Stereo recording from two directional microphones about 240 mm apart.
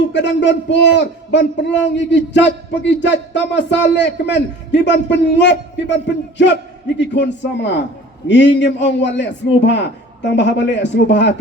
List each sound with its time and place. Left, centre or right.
0.1 s a man's voice: left